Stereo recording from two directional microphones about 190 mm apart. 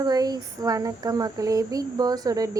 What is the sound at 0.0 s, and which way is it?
Speech, 20° right (ahead or behind).